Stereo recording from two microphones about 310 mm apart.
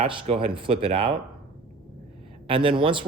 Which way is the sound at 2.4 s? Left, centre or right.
Centre.